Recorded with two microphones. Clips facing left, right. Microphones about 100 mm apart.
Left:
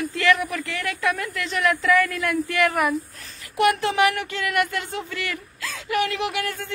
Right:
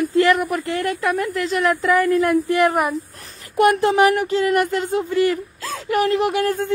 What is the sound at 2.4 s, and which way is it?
Speech, 25° right (ahead or behind).